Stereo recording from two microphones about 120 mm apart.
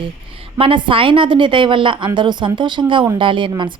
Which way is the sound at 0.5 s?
45° right (ahead or behind).